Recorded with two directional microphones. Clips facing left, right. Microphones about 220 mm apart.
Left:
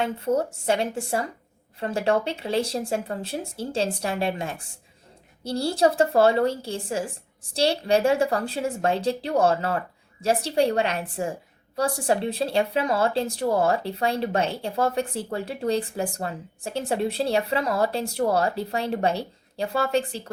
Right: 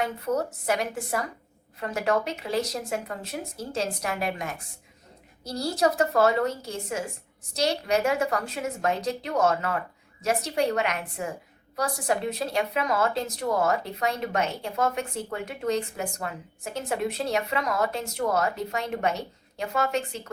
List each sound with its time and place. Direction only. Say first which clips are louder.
0.0 s speech: left 3 dB; 30° left (ahead or behind)